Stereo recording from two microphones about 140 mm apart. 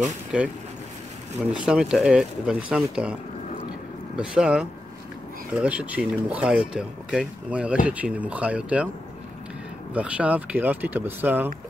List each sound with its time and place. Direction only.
1.5 s speech: 5° right (ahead or behind)
4.2 s speech: 5° right (ahead or behind)
9.9 s speech: 10° right (ahead or behind)